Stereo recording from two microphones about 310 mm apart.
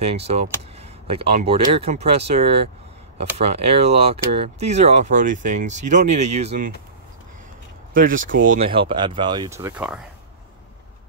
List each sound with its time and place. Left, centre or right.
0.0 s speech: centre
7.9 s speech: right; by 9.9 s centre